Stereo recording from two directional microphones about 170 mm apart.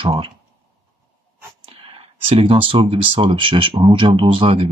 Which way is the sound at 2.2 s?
30° right (ahead or behind).